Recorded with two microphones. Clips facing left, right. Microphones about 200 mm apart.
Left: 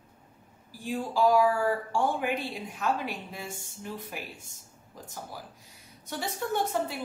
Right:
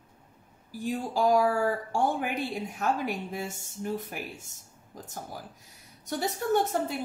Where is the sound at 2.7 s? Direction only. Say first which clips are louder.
Right 1 dB; 45° right (ahead or behind).